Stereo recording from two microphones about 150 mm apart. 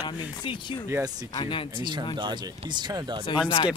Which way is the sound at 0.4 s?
30° left (ahead or behind).